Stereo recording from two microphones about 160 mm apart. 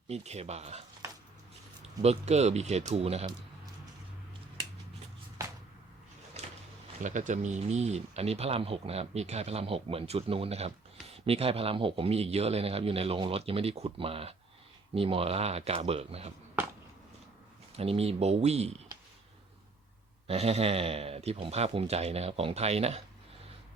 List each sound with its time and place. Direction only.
0.1 s speech: 40° right (ahead or behind)
2.0 s speech: 40° right (ahead or behind)
6.4 s a sound: 40° right (ahead or behind)
7.0 s speech: 50° right (ahead or behind)
17.7 s speech: 40° right (ahead or behind)
20.2 s speech: 40° right (ahead or behind)